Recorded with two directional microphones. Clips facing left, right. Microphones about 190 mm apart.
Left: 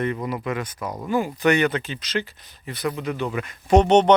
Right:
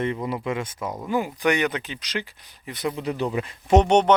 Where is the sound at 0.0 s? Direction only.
25° right (ahead or behind).